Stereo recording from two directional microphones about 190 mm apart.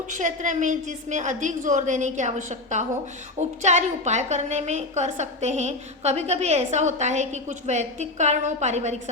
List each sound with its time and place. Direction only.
0.1 s a woman's voice: 40° right (ahead or behind)